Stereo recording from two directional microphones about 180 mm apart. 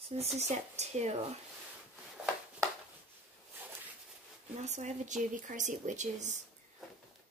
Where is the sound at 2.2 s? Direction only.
5° right (ahead or behind).